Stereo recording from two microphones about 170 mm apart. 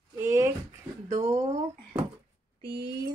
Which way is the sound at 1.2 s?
45° right (ahead or behind).